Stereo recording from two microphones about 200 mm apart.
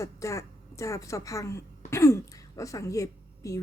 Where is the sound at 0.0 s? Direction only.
15° left (ahead or behind).